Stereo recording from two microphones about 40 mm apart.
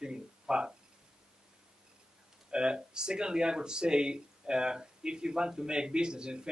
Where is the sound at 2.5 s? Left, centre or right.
Right.